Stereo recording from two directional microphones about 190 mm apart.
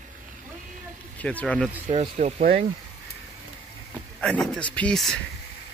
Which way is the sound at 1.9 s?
35° right (ahead or behind).